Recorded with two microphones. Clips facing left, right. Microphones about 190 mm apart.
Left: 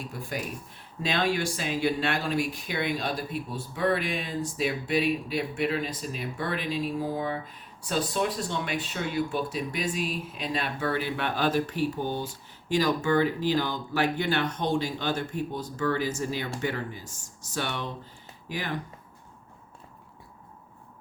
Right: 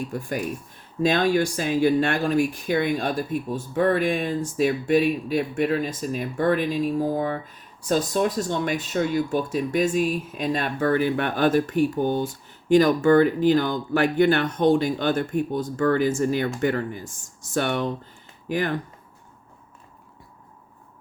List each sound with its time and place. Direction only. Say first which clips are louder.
0.1 s speech: right 6 dB; 45° right (ahead or behind)